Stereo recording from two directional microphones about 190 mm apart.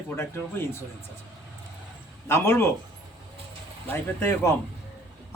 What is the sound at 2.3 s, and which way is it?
Speech, 15° left (ahead or behind).